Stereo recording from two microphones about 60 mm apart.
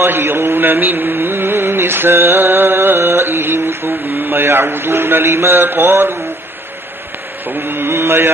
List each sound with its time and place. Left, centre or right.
0.0 s mantra: right
7.4 s mantra: right